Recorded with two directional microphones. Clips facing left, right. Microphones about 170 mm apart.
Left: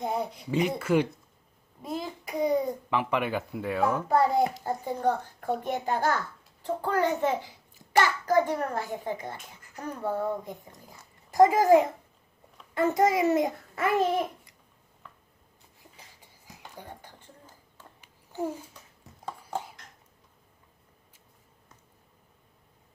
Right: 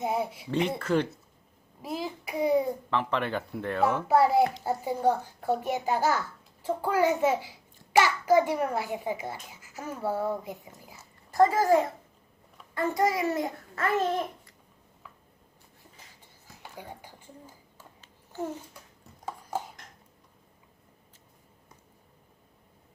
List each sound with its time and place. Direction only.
0.0 s a child's voice: 5° right (ahead or behind)
0.8 s a child's voice: 10° left (ahead or behind)
1.8 s a child's voice: 5° right (ahead or behind)
2.9 s a child's voice: 10° left (ahead or behind); by 11.0 s 5° right (ahead or behind)
11.3 s a child's voice: 15° left (ahead or behind)
16.7 s a sound: 10° right (ahead or behind)
18.0 s babbling: 10° left (ahead or behind)
19.2 s a sound: 5° right (ahead or behind)